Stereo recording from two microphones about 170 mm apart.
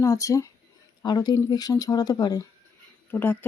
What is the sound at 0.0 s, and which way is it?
Speech, 20° left (ahead or behind).